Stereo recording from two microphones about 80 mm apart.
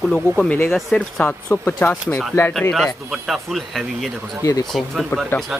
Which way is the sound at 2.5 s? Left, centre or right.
Centre.